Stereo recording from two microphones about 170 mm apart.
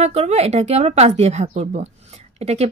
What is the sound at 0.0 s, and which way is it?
Speech, 40° right (ahead or behind).